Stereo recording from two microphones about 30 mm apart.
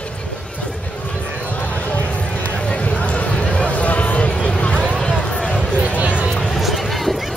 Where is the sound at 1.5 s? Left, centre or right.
Left.